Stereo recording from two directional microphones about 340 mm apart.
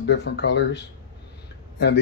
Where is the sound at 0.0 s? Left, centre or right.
Left.